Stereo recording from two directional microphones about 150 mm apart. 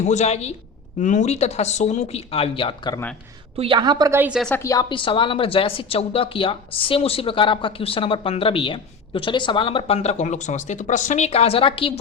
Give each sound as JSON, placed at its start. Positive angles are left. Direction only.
{"t": 0.0, "sound": "speech", "side_deg": 50}
{"t": 0.9, "sound": "speech", "side_deg": 55}
{"t": 3.6, "sound": "a woman's voice", "side_deg": -30}
{"t": 4.2, "sound": "a woman's voice", "side_deg": -5}
{"t": 4.6, "sound": "speech", "side_deg": 25}